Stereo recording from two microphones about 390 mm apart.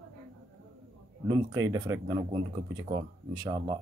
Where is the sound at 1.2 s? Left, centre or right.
Centre.